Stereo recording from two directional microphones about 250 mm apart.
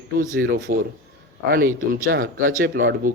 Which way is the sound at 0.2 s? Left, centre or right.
Right.